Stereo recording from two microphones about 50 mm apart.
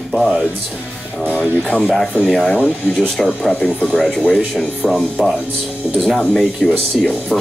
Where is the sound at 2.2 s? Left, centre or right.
Centre.